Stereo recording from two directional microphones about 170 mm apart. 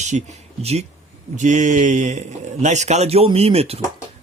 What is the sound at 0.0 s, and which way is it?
A man's voice, 45° right (ahead or behind).